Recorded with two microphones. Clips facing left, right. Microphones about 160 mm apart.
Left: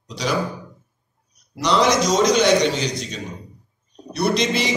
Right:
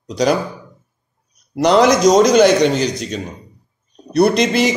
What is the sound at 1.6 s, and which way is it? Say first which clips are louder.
A man's voice: right 7 dB; 50° right (ahead or behind).